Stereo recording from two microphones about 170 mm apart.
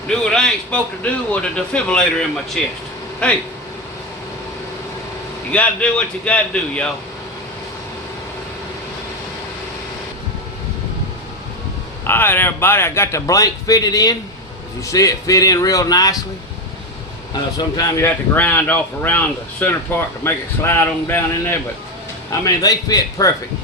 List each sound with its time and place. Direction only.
0.1 s a man's voice: 5° left (ahead or behind)
5.5 s speech: 5° left (ahead or behind)
12.0 s a man's voice: 10° left (ahead or behind)
17.3 s a man's voice: 25° left (ahead or behind)